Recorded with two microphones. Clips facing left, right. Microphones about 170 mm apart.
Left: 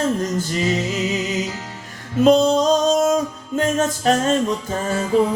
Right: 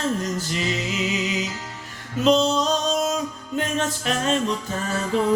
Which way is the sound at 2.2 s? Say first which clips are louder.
Left 5 dB; 50° left (ahead or behind).